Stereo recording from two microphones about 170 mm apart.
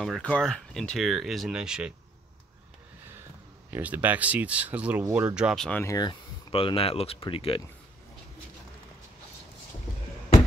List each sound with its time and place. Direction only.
0.0 s speech: 5° left (ahead or behind)
3.7 s speech: 10° right (ahead or behind)
5.7 s speech: 10° left (ahead or behind)
5.9 s speech: 30° left (ahead or behind)